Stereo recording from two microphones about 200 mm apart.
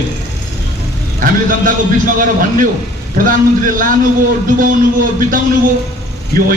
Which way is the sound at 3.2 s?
45° right (ahead or behind).